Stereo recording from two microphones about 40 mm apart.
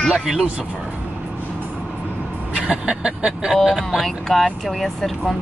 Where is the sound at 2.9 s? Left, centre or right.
Right.